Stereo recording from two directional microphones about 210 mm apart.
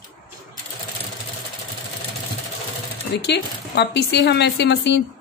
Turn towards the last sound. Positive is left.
turn(degrees=55)  # may be behind; listen again after turning